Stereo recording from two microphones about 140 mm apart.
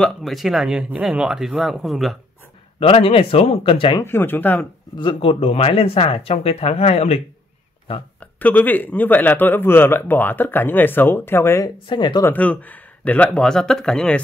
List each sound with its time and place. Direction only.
0.0 s speech: centre (ahead or behind)
2.8 s speech: 40° left (ahead or behind)
4.0 s speech: 15° left (ahead or behind)
4.9 s speech: 35° left (ahead or behind)
8.4 s speech: 10° left (ahead or behind)
11.9 s speech: 35° left (ahead or behind)
12.2 s speech: 10° left (ahead or behind)